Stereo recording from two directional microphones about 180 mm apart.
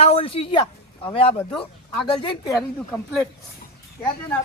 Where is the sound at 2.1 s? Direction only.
30° left (ahead or behind).